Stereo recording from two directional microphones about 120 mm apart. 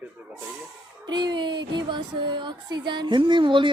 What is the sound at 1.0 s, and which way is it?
Speech, 40° right (ahead or behind).